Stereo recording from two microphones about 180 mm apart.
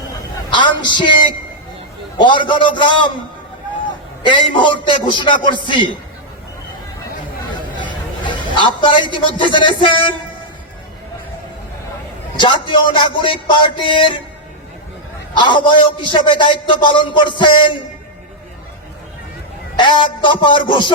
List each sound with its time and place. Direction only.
0.5 s a man's voice: 25° left (ahead or behind)
2.1 s a man's voice: 25° left (ahead or behind)
4.2 s a man's voice: 25° left (ahead or behind)
8.4 s a man's voice: 25° left (ahead or behind)
12.4 s a man's voice: 25° left (ahead or behind)
15.4 s a man's voice: 25° left (ahead or behind)
19.7 s a man's voice: 25° left (ahead or behind)